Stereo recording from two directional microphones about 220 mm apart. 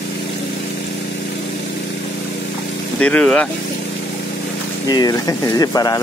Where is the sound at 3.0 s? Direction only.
5° left (ahead or behind).